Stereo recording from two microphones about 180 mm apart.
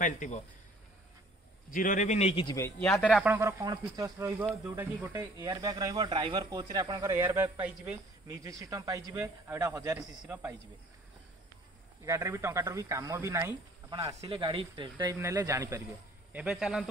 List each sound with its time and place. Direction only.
0.0 s speech: 45° left (ahead or behind)
1.7 s a man's voice: 45° left (ahead or behind); by 2.6 s 25° left (ahead or behind)
2.8 s speech: 5° left (ahead or behind)
3.3 s speech: 15° right (ahead or behind)
12.0 s speech: 15° right (ahead or behind)
14.2 s speech: 25° right (ahead or behind)
16.3 s speech: 5° right (ahead or behind)